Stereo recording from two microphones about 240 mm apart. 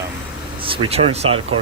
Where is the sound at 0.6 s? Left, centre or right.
Right.